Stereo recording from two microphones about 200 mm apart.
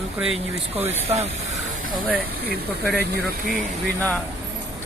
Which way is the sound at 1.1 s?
30° right (ahead or behind).